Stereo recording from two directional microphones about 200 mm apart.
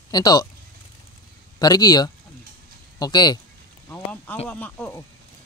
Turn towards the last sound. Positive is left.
turn(degrees=10)  # may be behind; listen again after turning